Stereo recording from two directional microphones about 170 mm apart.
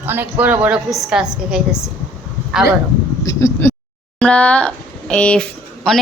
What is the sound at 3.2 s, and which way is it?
A woman's voice, 20° left (ahead or behind).